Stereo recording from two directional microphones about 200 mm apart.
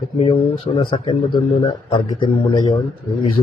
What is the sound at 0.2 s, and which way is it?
Speech, 30° left (ahead or behind).